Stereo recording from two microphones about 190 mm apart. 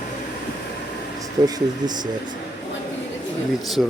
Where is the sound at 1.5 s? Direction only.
20° right (ahead or behind).